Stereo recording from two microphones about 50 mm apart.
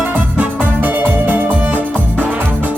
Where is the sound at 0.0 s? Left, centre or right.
Right.